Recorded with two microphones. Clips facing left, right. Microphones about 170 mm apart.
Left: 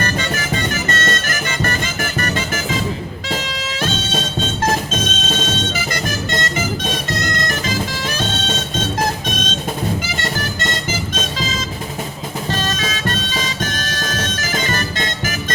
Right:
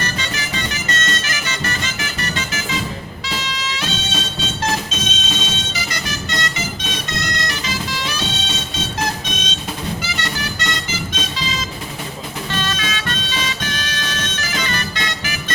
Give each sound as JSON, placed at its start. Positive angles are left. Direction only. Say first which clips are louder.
{"t": 0.0, "sound": "music", "louder": "left 5 dB", "side_deg": 50}
{"t": 10.2, "sound": "vehicle", "louder": "left 3 dB", "side_deg": 45}
{"t": 12.5, "sound": "music", "louder": "left 2 dB", "side_deg": 40}